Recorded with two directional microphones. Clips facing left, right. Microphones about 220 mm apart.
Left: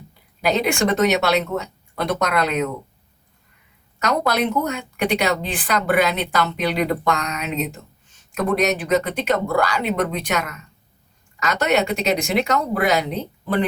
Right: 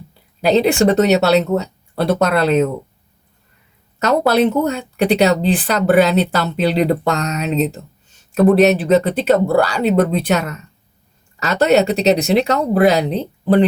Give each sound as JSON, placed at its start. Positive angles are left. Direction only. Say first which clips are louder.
{"t": 0.4, "sound": "speech", "louder": "right 7 dB", "side_deg": -30}
{"t": 4.0, "sound": "speech", "louder": "right 7 dB", "side_deg": -30}